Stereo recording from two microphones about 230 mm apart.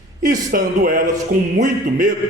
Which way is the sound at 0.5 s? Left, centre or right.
Right.